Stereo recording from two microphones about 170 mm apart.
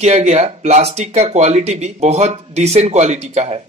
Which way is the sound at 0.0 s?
40° right (ahead or behind).